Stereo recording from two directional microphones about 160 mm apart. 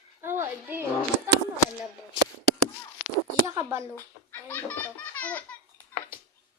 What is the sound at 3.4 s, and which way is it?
Speech, 20° right (ahead or behind).